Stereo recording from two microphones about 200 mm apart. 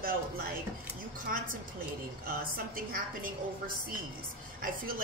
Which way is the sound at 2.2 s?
45° right (ahead or behind).